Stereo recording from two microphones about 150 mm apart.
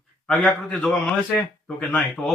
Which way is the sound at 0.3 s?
5° left (ahead or behind).